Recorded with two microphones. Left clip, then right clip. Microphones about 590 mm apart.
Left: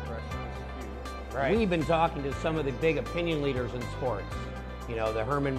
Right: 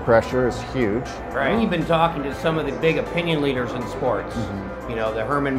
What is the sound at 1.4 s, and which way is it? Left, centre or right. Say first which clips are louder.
Speech: right 5 dB; left.